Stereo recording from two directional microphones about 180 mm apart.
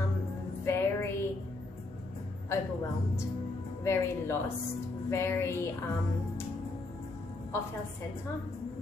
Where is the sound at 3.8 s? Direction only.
15° left (ahead or behind).